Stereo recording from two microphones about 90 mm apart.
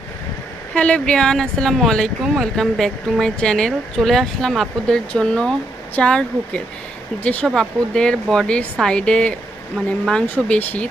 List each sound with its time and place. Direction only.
0.7 s speech: 15° left (ahead or behind)
10.2 s speech: 20° left (ahead or behind)